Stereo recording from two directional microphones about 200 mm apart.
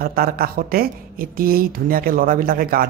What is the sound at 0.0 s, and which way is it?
Speech, 50° right (ahead or behind).